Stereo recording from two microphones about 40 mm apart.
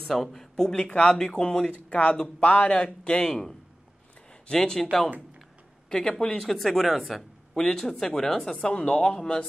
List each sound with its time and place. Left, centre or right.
0.1 s a man's voice: centre
1.7 s a man's voice: left
3.3 s speech: centre
5.9 s speech: centre
6.4 s speech: centre
7.1 s a sound: centre
7.6 s speech: centre
8.6 s a man's voice: left